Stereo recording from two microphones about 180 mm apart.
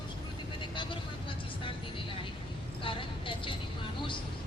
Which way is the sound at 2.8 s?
30° left (ahead or behind).